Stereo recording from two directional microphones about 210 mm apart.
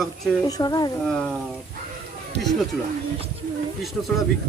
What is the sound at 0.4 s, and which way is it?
Speech, 15° left (ahead or behind).